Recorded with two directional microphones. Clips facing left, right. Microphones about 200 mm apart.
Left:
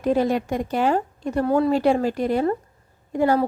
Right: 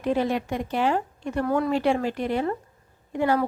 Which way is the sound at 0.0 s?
40° left (ahead or behind).